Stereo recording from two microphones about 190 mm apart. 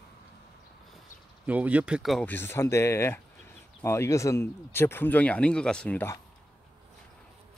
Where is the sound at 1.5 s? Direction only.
5° right (ahead or behind); by 6.1 s 10° left (ahead or behind).